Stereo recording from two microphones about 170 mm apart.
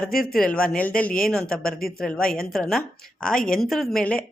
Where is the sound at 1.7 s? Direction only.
60° left (ahead or behind).